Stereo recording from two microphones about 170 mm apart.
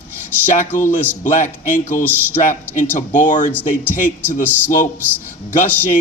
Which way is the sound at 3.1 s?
50° left (ahead or behind).